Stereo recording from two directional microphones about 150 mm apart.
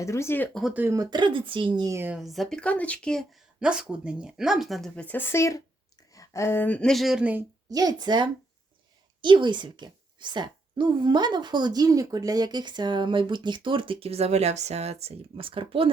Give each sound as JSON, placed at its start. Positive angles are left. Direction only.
{"t": 0.0, "sound": "speech", "side_deg": 20}
{"t": 0.7, "sound": "speech", "side_deg": -10}
{"t": 0.9, "sound": "a woman's voice", "side_deg": -30}
{"t": 2.1, "sound": "speech", "side_deg": 0}
{"t": 7.7, "sound": "a woman's voice", "side_deg": -25}